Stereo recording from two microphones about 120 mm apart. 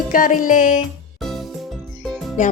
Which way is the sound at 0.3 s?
90° left.